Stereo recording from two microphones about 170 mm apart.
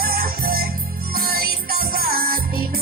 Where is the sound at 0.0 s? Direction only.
60° right (ahead or behind).